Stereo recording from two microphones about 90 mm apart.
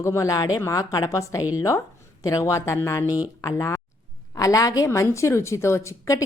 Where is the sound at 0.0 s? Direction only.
35° left (ahead or behind).